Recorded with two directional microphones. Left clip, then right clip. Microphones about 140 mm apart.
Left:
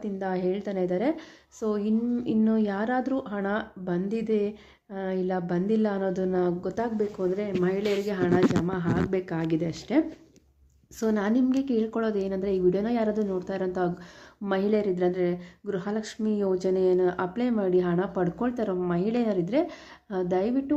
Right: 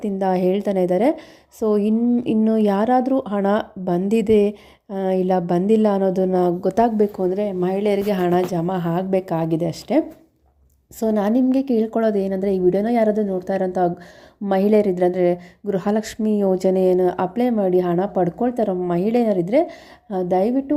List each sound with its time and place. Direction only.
0.0 s speech: 55° right (ahead or behind)
7.3 s a woman's voice: 35° right (ahead or behind)
11.0 s a woman's voice: 35° right (ahead or behind)